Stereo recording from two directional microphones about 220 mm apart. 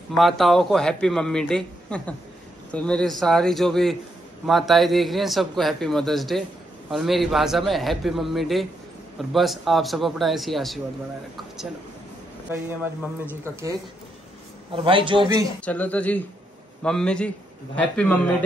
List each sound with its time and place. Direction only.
0.1 s a man's voice: centre (ahead or behind)
14.7 s a man's voice: 25° right (ahead or behind)
15.6 s a man's voice: 5° left (ahead or behind)